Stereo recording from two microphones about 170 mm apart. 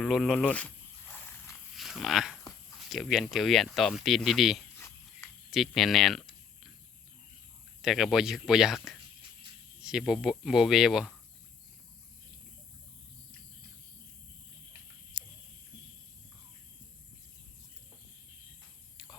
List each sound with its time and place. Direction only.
0.0 s speech: centre (ahead or behind)
1.7 s dog: centre (ahead or behind)
2.9 s speech: centre (ahead or behind)
7.8 s speech: centre (ahead or behind)
15.1 s a sound: 25° right (ahead or behind)